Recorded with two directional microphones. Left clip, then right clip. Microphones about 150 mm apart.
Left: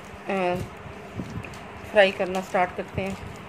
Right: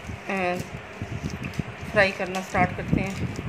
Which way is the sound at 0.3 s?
35° left (ahead or behind).